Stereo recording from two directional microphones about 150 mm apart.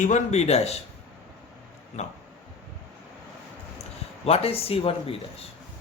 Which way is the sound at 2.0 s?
50° left (ahead or behind).